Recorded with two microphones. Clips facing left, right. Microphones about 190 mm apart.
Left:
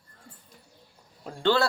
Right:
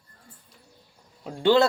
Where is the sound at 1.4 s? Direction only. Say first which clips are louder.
Right 5 dB; 15° right (ahead or behind).